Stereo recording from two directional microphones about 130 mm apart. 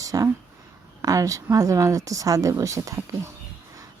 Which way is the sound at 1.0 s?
25° right (ahead or behind).